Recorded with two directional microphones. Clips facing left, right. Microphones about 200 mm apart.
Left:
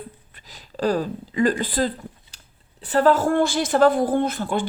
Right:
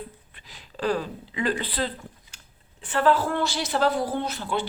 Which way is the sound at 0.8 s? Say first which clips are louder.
Left 4 dB; 40° left (ahead or behind).